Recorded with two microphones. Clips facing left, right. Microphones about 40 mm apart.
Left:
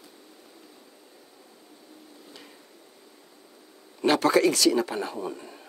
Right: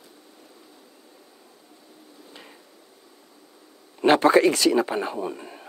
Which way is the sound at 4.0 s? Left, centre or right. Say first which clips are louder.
Right 4 dB; right.